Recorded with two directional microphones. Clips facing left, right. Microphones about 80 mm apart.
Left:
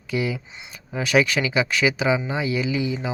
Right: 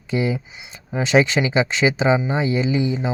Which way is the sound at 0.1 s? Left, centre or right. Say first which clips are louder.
Right 3 dB; right.